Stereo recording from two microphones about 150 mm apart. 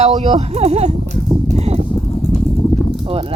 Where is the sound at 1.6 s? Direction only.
45° right (ahead or behind).